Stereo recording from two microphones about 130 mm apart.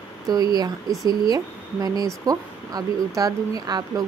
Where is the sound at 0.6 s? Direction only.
30° right (ahead or behind).